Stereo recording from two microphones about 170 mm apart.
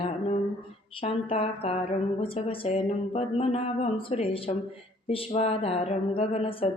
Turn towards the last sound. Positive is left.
turn(degrees=30)  # may be behind; listen again after turning